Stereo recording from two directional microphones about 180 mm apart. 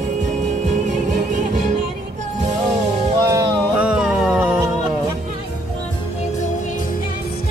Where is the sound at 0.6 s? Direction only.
40° right (ahead or behind).